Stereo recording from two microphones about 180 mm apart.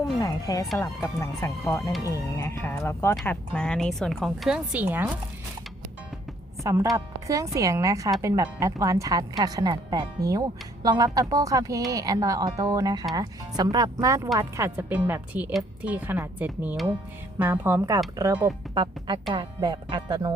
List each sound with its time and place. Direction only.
0.0 s a woman's voice: 20° left (ahead or behind); by 5.1 s 10° right (ahead or behind)
6.6 s a woman's voice: 15° right (ahead or behind)